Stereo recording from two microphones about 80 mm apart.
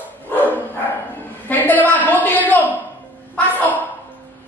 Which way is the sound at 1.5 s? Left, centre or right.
Left.